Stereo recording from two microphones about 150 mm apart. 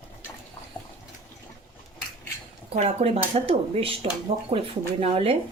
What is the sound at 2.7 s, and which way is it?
Speech, 45° right (ahead or behind).